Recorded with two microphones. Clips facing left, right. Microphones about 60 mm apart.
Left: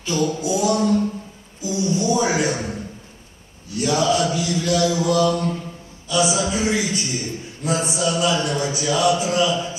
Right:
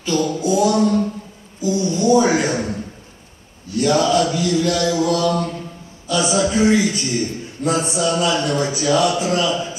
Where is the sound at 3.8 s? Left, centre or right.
Right.